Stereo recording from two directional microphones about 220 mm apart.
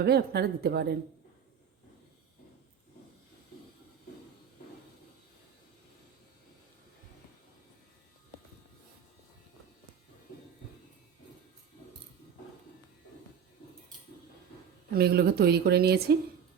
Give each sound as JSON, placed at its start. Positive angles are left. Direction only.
{"t": 0.0, "sound": "speech", "side_deg": -45}
{"t": 14.9, "sound": "speech", "side_deg": -45}